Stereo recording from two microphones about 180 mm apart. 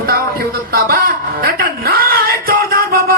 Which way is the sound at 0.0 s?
55° right (ahead or behind).